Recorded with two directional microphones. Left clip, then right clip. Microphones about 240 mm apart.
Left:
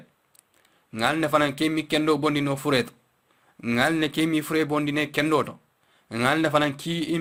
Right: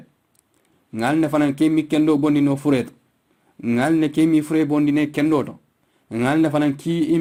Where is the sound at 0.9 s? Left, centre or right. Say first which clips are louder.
Right 2 dB; left.